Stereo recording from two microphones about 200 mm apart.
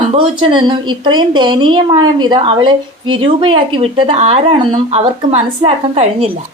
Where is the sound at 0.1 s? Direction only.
25° right (ahead or behind).